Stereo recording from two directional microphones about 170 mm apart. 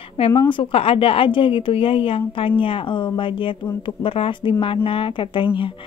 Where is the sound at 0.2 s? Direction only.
30° left (ahead or behind).